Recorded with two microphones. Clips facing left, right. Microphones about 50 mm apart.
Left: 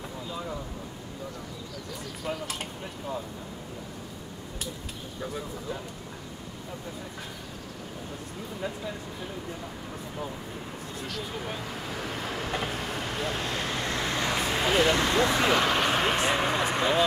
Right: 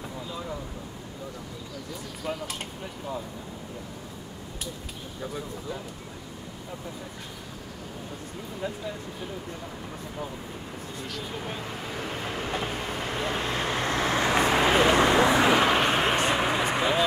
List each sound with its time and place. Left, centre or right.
0.3 s a sound: centre
2.2 s speech: centre
5.2 s speech: centre
8.5 s speech: centre
11.0 s speech: centre